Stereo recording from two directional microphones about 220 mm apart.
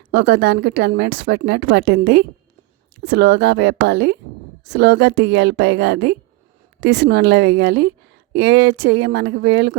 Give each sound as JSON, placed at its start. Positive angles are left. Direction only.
{"t": 0.1, "sound": "a woman's voice", "side_deg": -50}